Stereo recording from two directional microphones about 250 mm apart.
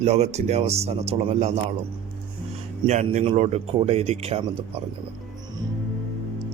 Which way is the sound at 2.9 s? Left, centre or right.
Right.